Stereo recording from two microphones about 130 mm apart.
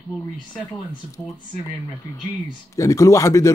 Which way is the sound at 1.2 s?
10° left (ahead or behind).